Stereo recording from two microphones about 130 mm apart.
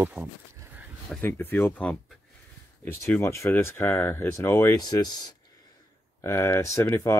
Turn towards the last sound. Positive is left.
turn(degrees=20)  # may be behind; listen again after turning